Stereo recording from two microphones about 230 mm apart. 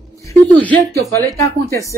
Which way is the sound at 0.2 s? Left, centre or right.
Centre.